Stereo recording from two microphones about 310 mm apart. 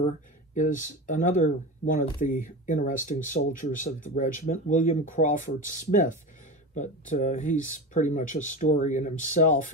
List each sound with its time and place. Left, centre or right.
0.6 s speech: left